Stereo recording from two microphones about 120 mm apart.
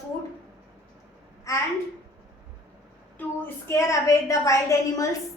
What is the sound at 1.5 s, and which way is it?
Speech, 25° left (ahead or behind).